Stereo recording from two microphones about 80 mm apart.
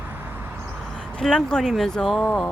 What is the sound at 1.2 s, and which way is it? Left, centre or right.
Speech, centre.